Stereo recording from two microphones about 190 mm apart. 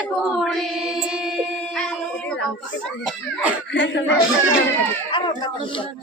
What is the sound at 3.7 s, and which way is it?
Speech, 70° left (ahead or behind).